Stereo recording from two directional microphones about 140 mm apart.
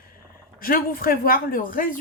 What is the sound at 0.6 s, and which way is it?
A woman's voice, 90° left.